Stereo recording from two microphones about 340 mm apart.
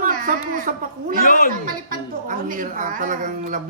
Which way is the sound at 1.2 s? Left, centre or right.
Left.